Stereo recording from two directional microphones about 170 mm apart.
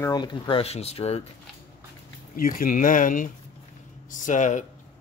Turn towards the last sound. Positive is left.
turn(degrees=45)  # may be behind; listen again after turning